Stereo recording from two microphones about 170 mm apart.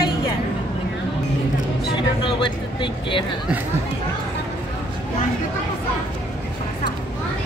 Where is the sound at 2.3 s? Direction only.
25° left (ahead or behind).